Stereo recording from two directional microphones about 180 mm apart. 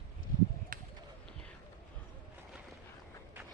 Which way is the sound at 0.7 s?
50° right (ahead or behind).